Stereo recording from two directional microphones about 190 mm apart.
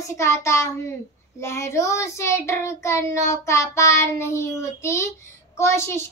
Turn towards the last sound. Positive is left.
turn(degrees=15)  # may be behind; listen again after turning